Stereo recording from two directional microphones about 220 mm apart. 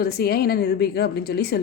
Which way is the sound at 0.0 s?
45° left (ahead or behind).